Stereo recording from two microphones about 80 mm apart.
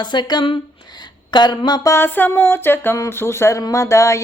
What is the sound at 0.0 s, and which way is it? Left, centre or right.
Speech, left.